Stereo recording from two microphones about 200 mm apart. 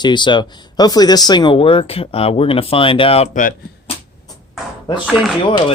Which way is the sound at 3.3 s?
40° left (ahead or behind).